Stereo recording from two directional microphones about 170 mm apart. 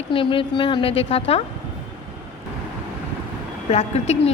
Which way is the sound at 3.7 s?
40° left (ahead or behind).